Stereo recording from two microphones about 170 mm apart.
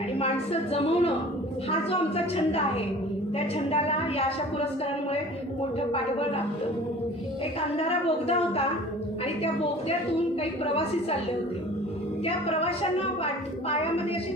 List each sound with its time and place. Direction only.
0.2 s a woman's voice: 35° left (ahead or behind)
5.9 s a woman's voice: 35° left (ahead or behind)
7.8 s a woman's voice: 35° left (ahead or behind)
12.2 s a woman's voice: 35° left (ahead or behind)